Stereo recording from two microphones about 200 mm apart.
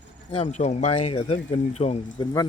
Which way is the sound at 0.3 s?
30° left (ahead or behind).